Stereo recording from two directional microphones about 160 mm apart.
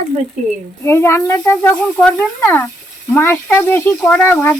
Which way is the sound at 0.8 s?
15° left (ahead or behind).